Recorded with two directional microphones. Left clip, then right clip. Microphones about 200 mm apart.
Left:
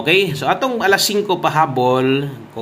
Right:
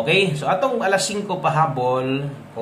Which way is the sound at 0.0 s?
30° left (ahead or behind).